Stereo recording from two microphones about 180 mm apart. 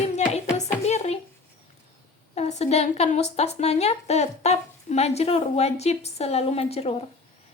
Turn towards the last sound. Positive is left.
turn(degrees=30)  # may be behind; listen again after turning